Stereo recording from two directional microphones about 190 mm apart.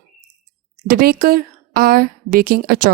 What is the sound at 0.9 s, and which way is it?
A woman's voice, 50° right (ahead or behind).